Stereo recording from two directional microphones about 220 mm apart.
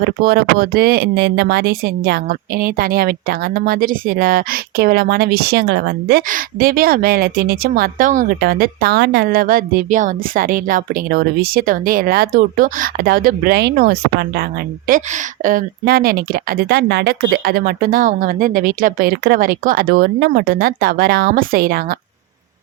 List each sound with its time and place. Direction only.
0.0 s speech: 45° right (ahead or behind)